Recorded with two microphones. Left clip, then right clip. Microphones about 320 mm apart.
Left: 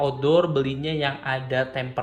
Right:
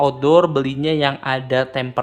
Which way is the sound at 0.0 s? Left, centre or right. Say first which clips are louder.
Right 6 dB; centre.